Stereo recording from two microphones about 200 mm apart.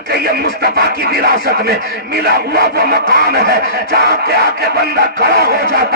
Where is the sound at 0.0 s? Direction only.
55° right (ahead or behind).